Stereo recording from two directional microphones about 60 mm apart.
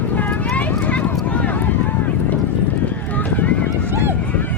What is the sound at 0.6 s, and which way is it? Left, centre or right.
Run, left.